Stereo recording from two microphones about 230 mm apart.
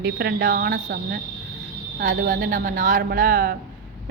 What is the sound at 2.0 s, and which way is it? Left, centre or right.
Speech, right.